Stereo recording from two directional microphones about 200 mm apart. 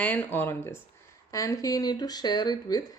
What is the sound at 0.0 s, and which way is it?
Speech, 5° left (ahead or behind).